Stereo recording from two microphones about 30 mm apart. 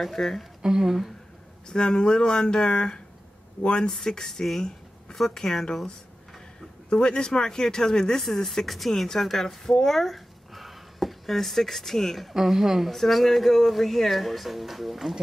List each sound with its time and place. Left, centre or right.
0.0 s speech: centre
0.6 s speech: right
1.7 s speech: left
3.9 s speech: left
4.6 s a sound: left
5.1 s speech: centre
6.9 s speech: left; by 8.5 s centre
8.5 s speech: centre
9.8 s a sound: centre
12.4 s a woman's voice: centre
12.9 s speech: centre